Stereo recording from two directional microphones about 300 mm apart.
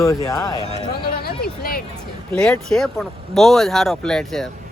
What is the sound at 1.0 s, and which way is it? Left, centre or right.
Speech, left.